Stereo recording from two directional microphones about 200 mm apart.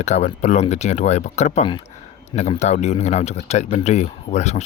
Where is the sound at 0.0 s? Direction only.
35° left (ahead or behind).